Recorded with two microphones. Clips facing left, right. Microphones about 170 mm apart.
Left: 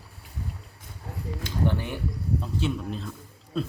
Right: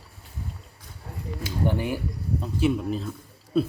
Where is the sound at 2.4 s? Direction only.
5° right (ahead or behind).